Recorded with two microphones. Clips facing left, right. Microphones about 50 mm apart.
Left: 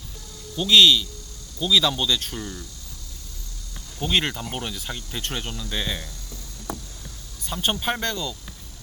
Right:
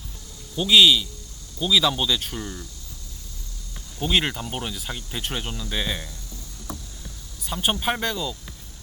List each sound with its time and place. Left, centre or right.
0.5 s speech: centre
4.0 s speech: centre
7.4 s speech: centre